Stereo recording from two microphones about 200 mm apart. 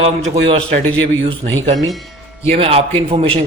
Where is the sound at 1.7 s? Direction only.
Centre (ahead or behind).